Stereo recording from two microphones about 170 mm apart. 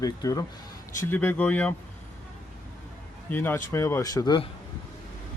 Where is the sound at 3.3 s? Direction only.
10° left (ahead or behind).